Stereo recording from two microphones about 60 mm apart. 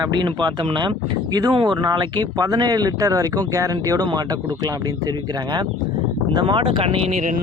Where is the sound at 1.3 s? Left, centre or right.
Right.